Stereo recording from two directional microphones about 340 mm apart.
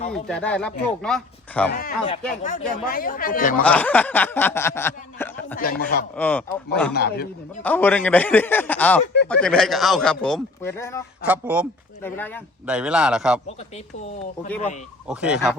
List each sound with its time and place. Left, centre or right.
0.1 s speech: centre
1.7 s speech: left
3.6 s speech: centre
5.5 s speech: left
6.1 s speech: centre
6.9 s speech: left
7.6 s speech: centre
11.3 s speech: centre
12.0 s speech: centre
15.0 s speech: centre